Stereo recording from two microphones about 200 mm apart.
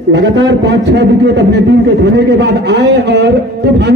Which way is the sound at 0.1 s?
60° right (ahead or behind).